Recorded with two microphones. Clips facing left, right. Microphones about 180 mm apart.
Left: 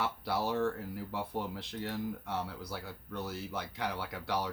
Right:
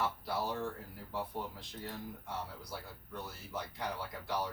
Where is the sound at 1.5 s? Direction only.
80° left.